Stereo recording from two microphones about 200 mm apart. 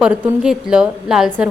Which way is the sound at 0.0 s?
5° right (ahead or behind).